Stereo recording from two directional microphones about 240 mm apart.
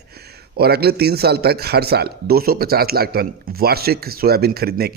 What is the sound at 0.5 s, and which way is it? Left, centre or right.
A man's voice, right.